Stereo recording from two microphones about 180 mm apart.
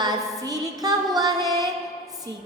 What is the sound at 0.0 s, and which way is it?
Music, 20° right (ahead or behind).